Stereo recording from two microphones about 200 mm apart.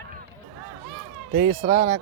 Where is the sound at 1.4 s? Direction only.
35° right (ahead or behind).